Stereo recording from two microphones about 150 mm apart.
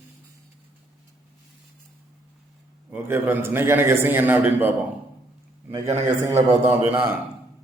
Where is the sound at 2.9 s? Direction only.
15° right (ahead or behind).